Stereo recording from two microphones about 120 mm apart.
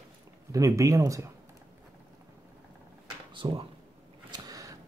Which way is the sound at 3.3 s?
45° right (ahead or behind).